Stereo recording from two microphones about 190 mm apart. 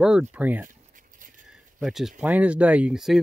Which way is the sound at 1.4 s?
Centre (ahead or behind).